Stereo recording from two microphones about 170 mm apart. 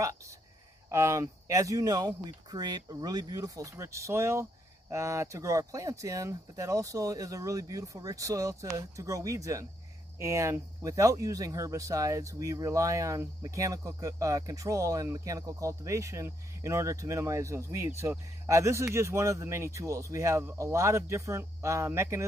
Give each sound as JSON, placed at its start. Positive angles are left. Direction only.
{"t": 0.8, "sound": "speech", "side_deg": -15}